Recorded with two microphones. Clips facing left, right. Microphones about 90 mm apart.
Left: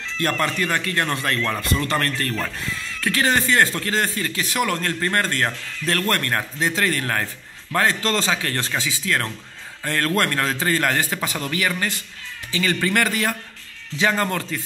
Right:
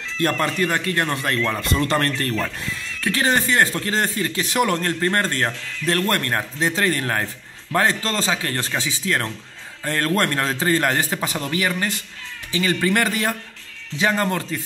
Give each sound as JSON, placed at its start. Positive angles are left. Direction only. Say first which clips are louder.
{"t": 0.6, "sound": "speech", "louder": "right 1 dB", "side_deg": -25}
{"t": 1.6, "sound": "speech", "louder": "right 2 dB", "side_deg": -30}